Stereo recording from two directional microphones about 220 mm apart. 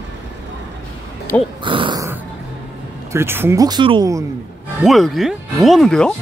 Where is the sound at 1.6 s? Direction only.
20° right (ahead or behind).